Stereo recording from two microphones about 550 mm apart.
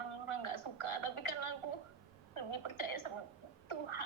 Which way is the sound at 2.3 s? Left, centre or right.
Left.